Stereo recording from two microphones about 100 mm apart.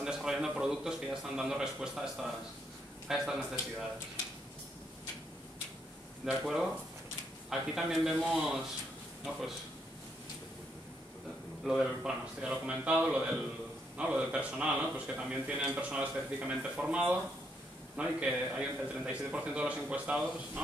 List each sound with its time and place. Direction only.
0.0 s speech: 5° right (ahead or behind)
6.2 s speech: 5° right (ahead or behind)
11.6 s speech: 5° right (ahead or behind)